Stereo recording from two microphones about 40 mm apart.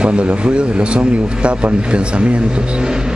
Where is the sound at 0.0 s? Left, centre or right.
Right.